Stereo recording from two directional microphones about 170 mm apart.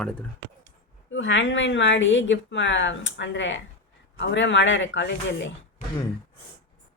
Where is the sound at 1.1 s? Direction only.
90° left.